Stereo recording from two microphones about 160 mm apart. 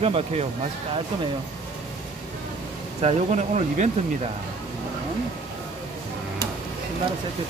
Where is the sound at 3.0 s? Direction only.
45° right (ahead or behind).